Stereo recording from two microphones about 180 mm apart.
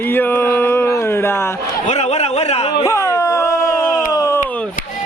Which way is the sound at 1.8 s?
40° left (ahead or behind).